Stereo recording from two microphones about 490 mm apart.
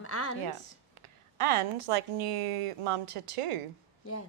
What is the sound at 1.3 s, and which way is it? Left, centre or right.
Speech, right.